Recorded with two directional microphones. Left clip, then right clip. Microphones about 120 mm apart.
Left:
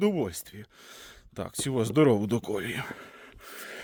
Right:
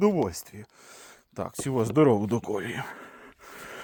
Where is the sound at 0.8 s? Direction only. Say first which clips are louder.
Left 1 dB; 30° left (ahead or behind).